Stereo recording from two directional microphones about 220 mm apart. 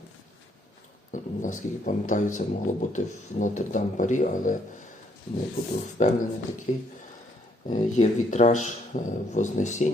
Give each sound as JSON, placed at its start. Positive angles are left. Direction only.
{"t": 1.1, "sound": "a man's voice", "side_deg": 35}
{"t": 5.6, "sound": "speech", "side_deg": 40}